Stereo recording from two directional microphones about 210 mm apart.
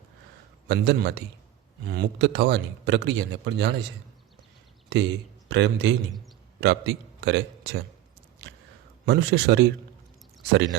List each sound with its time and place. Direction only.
0.7 s a man's voice: 55° right (ahead or behind)
5.5 s a man's voice: 55° right (ahead or behind)
9.0 s speech: 55° right (ahead or behind)